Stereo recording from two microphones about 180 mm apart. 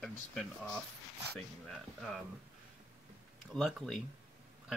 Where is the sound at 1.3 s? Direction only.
Centre (ahead or behind).